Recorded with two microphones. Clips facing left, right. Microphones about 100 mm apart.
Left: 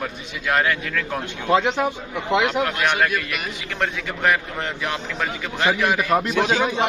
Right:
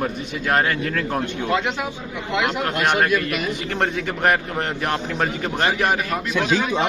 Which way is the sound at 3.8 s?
45° right (ahead or behind).